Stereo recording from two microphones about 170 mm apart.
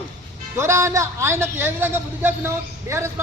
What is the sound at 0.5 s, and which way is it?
A man's voice, 15° right (ahead or behind).